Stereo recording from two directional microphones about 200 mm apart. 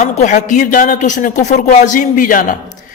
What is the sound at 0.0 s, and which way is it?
A man's voice, 35° left (ahead or behind).